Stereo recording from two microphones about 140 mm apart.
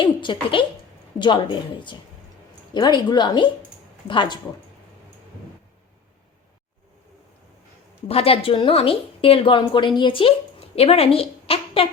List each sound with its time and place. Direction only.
0.0 s a woman's voice: 35° left (ahead or behind)
8.0 s a woman's voice: 45° left (ahead or behind)